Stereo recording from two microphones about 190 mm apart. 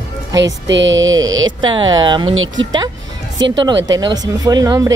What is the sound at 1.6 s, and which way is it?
Speech, 25° right (ahead or behind).